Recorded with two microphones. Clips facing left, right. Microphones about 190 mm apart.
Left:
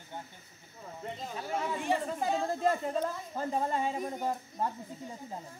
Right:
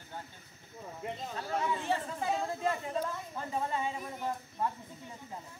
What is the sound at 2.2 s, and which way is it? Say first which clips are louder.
Speech: left 3 dB; 40° left (ahead or behind).